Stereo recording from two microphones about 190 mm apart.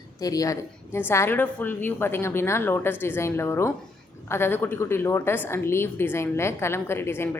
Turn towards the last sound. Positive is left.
turn(degrees=10)  # may be behind; listen again after turning